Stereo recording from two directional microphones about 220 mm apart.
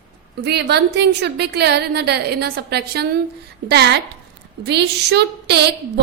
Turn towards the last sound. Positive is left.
turn(degrees=-50)  # may be behind; listen again after turning